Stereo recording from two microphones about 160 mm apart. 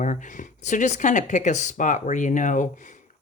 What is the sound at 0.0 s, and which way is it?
Speech, 50° left (ahead or behind).